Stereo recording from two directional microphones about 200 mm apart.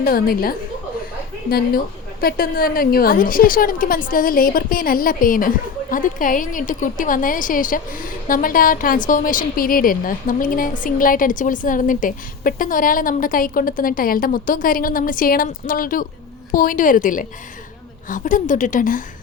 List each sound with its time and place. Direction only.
0.0 s a woman's voice: 45° left (ahead or behind)